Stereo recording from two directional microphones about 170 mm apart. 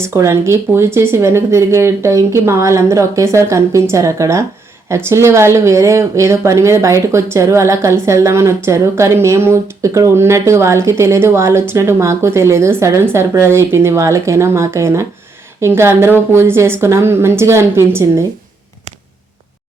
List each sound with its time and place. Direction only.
0.0 s speech: 15° right (ahead or behind)